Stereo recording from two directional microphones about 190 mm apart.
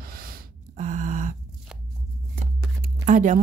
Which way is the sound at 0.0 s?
50° right (ahead or behind).